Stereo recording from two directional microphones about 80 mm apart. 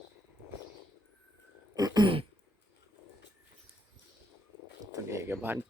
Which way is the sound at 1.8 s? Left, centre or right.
Right.